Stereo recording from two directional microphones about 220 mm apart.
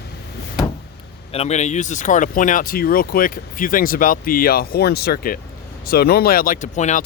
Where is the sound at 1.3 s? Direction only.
30° left (ahead or behind).